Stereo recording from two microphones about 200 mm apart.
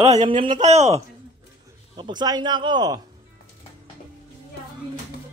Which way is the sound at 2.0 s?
20° right (ahead or behind).